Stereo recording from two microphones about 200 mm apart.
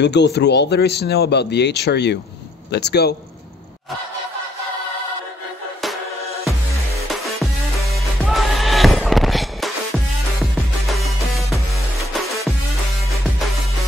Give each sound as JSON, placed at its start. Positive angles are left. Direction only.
{"t": 0.0, "sound": "speech", "side_deg": 60}
{"t": 7.9, "sound": "music", "side_deg": 0}